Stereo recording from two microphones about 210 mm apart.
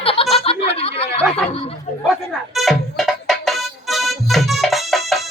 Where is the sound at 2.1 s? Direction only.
Centre (ahead or behind).